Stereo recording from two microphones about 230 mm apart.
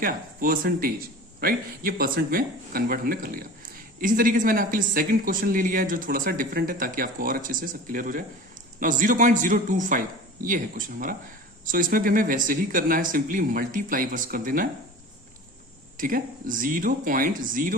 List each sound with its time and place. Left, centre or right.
0.0 s speech: right
16.0 s speech: right